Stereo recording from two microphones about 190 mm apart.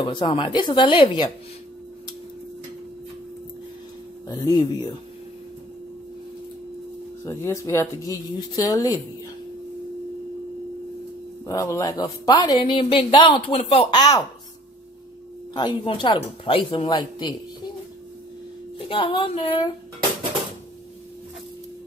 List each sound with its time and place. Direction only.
0.0 s a woman's voice: 25° left (ahead or behind)
4.3 s a woman's voice: 20° left (ahead or behind)
7.2 s speech: 15° left (ahead or behind)
11.4 s a woman's voice: 15° left (ahead or behind)
15.5 s a woman's voice: 25° left (ahead or behind)
18.9 s a woman's voice: 25° left (ahead or behind)